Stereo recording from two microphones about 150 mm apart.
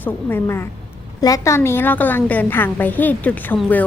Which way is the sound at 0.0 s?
15° left (ahead or behind).